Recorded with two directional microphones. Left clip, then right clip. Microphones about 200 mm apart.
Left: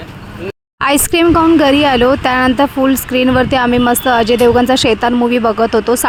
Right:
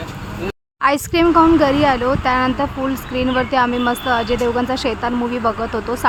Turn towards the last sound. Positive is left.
turn(degrees=35)  # may be behind; listen again after turning